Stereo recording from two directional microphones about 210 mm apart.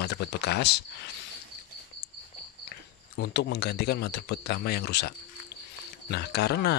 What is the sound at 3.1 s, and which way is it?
Speech, 55° left (ahead or behind).